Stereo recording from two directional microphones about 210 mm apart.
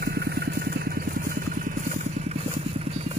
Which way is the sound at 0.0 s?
50° right (ahead or behind).